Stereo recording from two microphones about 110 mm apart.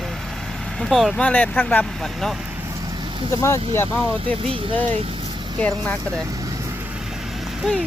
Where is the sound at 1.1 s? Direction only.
15° left (ahead or behind).